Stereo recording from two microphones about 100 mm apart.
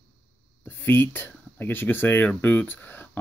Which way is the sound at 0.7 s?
20° left (ahead or behind).